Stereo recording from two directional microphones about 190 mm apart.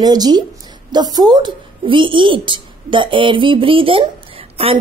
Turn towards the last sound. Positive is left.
turn(degrees=-30)  # may be behind; listen again after turning